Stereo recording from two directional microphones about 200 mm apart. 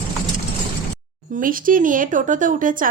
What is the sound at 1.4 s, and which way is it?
Speech, 45° right (ahead or behind).